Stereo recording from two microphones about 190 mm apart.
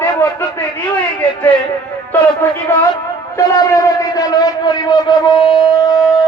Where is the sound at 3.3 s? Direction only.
20° left (ahead or behind).